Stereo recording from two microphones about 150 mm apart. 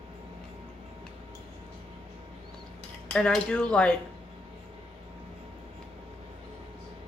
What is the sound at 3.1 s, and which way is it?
Speech, 5° left (ahead or behind).